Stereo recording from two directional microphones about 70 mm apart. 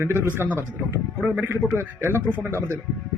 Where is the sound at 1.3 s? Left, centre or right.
Right.